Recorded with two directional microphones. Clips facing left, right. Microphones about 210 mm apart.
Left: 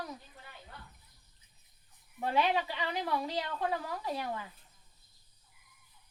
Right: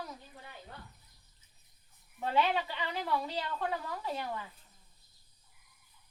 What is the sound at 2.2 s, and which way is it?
A woman's voice, 15° left (ahead or behind).